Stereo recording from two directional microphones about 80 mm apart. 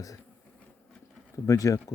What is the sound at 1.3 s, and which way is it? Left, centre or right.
Speech, left.